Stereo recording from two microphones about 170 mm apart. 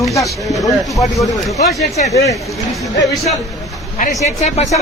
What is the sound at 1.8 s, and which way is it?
Speech, 40° left (ahead or behind).